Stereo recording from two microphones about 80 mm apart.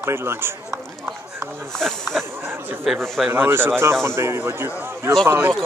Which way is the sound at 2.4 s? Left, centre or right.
Right.